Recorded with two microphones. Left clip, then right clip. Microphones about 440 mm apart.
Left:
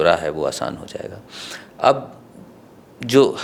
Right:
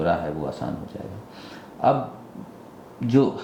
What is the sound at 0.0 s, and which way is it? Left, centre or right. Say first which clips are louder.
Speech: left 7 dB; left.